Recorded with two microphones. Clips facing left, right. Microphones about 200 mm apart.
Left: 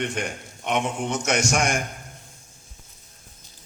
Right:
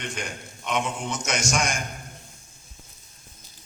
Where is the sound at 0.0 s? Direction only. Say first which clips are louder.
Left 6 dB; 60° left (ahead or behind).